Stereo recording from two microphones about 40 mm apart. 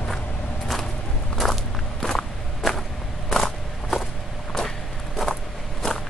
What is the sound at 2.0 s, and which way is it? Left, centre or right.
Walk, centre.